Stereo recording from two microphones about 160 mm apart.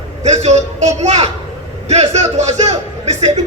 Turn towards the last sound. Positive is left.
turn(degrees=-45)  # may be behind; listen again after turning